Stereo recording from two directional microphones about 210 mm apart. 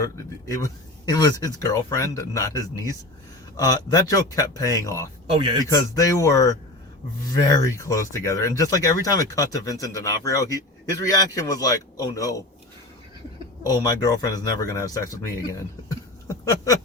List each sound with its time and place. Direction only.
0.5 s speech: 15° left (ahead or behind)
5.3 s a man's voice: 25° right (ahead or behind)
5.6 s speech: 15° left (ahead or behind)
13.8 s speech: 15° left (ahead or behind)
16.2 s a sound: 15° left (ahead or behind)